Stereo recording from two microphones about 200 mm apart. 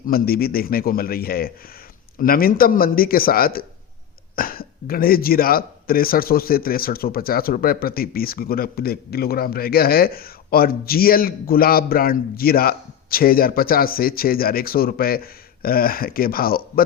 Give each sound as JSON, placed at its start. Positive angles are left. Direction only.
{"t": 0.1, "sound": "speech", "side_deg": 50}